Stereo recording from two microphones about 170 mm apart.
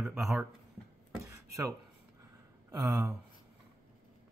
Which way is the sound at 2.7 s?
20° right (ahead or behind).